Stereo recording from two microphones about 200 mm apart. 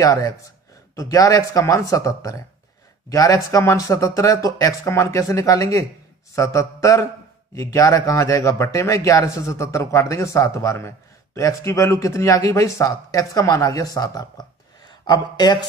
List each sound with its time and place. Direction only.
0.0 s a man's voice: 15° left (ahead or behind)